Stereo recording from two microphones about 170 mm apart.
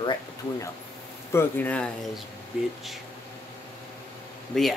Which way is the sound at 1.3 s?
10° left (ahead or behind).